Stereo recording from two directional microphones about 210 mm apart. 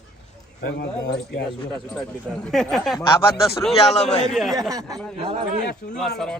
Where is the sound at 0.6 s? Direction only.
50° left (ahead or behind).